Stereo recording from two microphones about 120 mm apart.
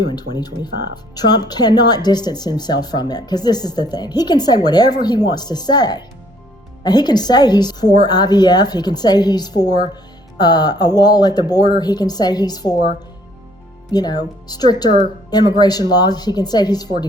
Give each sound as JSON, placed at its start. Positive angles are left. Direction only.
{"t": 0.1, "sound": "speech", "side_deg": 35}
{"t": 13.9, "sound": "speech", "side_deg": 35}